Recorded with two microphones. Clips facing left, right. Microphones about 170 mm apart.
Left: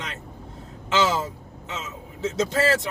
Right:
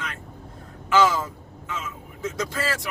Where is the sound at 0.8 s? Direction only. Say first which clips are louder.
Right 2 dB; 25° left (ahead or behind).